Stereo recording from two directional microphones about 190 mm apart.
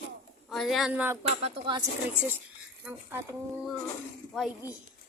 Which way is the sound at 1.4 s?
30° right (ahead or behind).